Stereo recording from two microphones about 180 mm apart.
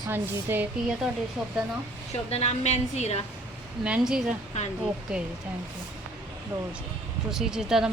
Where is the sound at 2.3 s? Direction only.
35° left (ahead or behind).